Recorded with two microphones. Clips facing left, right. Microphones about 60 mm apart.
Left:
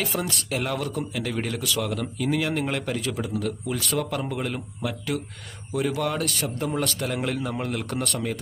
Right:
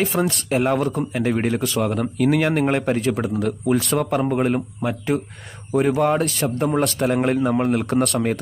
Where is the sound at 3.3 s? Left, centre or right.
Right.